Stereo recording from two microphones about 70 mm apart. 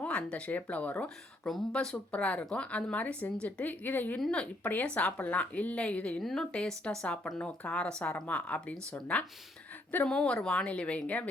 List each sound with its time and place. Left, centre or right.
0.0 s speech: centre